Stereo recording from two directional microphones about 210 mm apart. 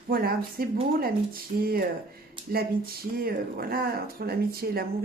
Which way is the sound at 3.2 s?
45° right (ahead or behind).